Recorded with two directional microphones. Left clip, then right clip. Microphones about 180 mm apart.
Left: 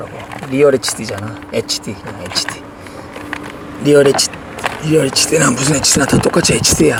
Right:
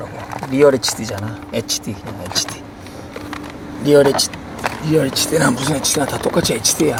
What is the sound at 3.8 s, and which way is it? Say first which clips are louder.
Speech: left 2 dB; 20° left (ahead or behind).